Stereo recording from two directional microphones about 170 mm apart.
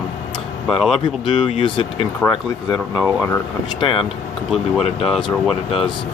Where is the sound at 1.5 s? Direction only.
35° left (ahead or behind).